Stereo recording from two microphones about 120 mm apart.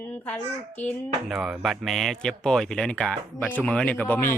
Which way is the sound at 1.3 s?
Centre (ahead or behind).